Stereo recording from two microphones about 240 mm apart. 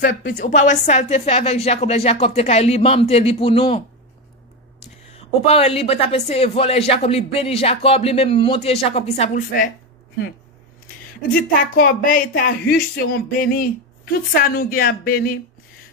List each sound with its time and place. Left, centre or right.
0.1 s a woman's voice: left
5.1 s a woman's voice: left
11.7 s speech: left